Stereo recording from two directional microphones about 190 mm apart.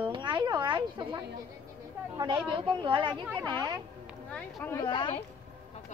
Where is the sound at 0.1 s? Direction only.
25° right (ahead or behind).